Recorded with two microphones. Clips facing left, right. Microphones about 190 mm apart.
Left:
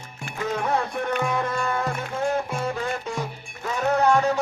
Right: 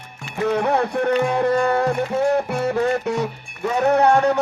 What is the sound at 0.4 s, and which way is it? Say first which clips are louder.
Speech: right 6 dB; 65° right (ahead or behind).